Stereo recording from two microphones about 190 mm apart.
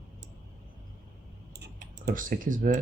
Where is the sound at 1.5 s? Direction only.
60° right (ahead or behind).